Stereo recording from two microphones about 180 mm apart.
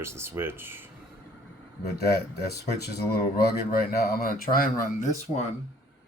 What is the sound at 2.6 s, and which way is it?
Speech, 60° left (ahead or behind).